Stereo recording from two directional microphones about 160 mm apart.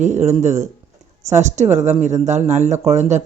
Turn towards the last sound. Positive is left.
turn(degrees=-45)  # may be behind; listen again after turning